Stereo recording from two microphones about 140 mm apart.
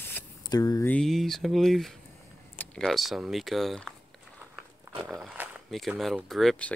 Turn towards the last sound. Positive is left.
turn(degrees=0)  # may be behind; listen again after turning